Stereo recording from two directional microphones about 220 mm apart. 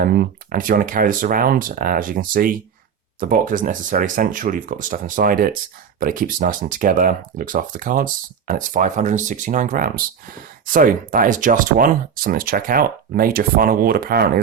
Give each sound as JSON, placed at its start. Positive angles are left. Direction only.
{"t": 0.0, "sound": "speech", "side_deg": -45}